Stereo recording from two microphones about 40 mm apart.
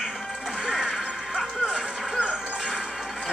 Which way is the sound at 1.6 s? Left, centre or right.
Centre.